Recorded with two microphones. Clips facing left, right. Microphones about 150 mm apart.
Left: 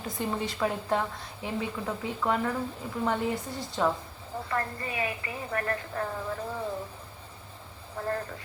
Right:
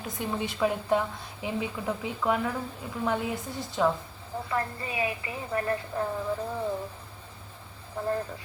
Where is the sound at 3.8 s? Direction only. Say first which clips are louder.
Right 2 dB; 10° right (ahead or behind).